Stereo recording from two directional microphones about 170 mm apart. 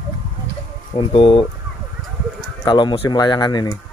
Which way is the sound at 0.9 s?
30° left (ahead or behind).